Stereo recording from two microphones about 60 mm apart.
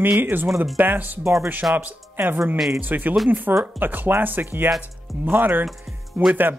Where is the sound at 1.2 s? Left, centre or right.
Right.